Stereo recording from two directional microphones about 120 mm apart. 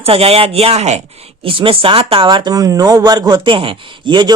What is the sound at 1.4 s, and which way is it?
Speech, 50° right (ahead or behind).